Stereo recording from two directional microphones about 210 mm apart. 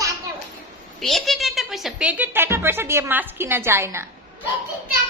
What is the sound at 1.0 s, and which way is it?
Speech, centre (ahead or behind).